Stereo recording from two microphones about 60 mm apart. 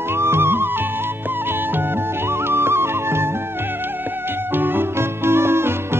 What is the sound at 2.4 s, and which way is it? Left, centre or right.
Music, right.